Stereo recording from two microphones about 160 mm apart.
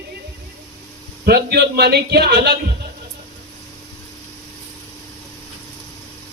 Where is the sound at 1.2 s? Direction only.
90° right.